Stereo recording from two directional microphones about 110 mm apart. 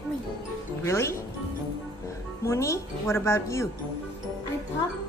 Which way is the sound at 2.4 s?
25° left (ahead or behind).